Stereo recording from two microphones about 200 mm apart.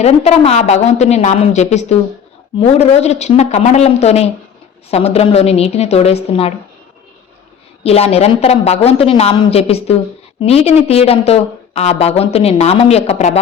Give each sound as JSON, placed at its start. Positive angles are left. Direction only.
{"t": 0.0, "sound": "a woman's voice", "side_deg": 30}
{"t": 7.9, "sound": "a woman's voice", "side_deg": 30}